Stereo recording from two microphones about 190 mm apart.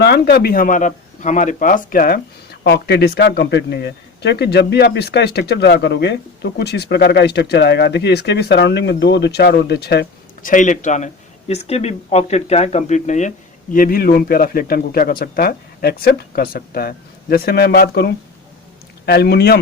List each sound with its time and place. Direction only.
0.0 s speech: 60° left (ahead or behind)
10.5 s speech: 40° left (ahead or behind); by 19.5 s 60° left (ahead or behind)